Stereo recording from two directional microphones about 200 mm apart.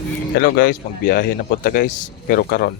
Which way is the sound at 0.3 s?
50° left (ahead or behind).